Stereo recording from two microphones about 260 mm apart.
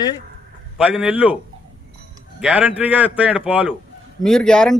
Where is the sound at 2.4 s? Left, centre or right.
Centre.